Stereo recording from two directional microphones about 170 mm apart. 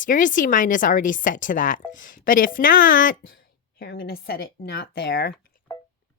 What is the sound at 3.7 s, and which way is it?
Speech, 65° left (ahead or behind).